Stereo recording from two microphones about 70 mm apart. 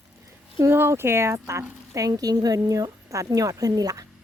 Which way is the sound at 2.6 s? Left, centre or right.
Right.